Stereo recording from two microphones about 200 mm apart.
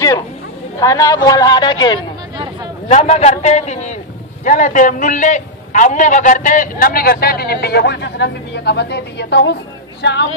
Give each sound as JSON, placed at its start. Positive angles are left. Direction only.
{"t": 0.7, "sound": "a woman's voice", "side_deg": 15}
{"t": 2.9, "sound": "a man's voice", "side_deg": 35}